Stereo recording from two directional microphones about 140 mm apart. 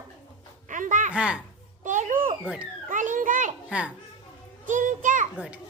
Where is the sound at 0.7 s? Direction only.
65° right (ahead or behind).